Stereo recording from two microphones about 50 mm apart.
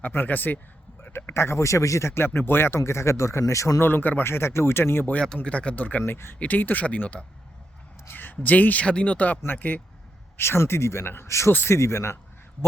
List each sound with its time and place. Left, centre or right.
0.0 s speech: left
1.0 s speech: left
3.8 s speech: left
4.2 s speech: left
5.2 s speech: centre
6.0 s speech: left
6.4 s speech: left
8.1 s speech: left
10.3 s speech: left
11.3 s speech: left